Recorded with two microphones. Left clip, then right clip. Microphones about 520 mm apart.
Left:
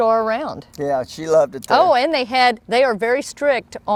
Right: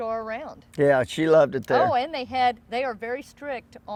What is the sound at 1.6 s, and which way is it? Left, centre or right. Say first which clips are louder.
Speech: left 7 dB; left.